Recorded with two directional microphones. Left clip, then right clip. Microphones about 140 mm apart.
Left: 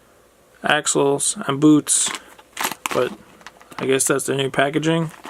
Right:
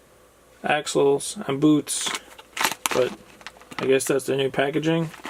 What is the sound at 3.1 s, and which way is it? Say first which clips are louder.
Typing: even; 10° left (ahead or behind).